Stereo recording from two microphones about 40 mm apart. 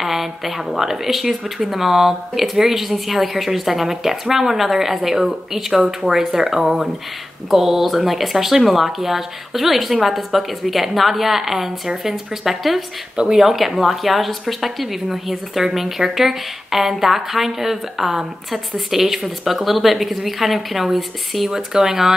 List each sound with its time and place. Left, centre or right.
0.0 s speech: centre
13.1 s speech: right
13.4 s speech: centre
21.5 s speech: centre